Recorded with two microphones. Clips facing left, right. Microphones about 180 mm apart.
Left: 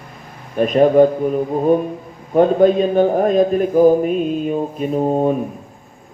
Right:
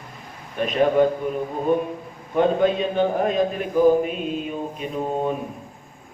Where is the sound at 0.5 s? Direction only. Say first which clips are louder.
Left 7 dB; 45° left (ahead or behind).